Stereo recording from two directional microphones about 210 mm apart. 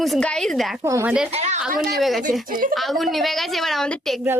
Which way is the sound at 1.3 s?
30° right (ahead or behind).